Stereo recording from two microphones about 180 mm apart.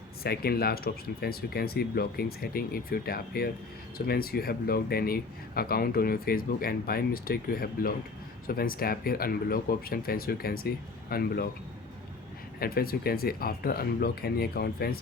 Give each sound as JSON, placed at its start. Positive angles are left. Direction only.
{"t": 0.2, "sound": "speech", "side_deg": 60}
{"t": 12.5, "sound": "speech", "side_deg": 55}